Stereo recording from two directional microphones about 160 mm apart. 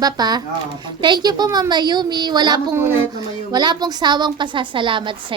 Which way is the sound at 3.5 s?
25° right (ahead or behind).